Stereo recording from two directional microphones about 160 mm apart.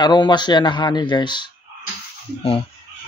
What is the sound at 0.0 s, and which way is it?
Speech, 25° left (ahead or behind).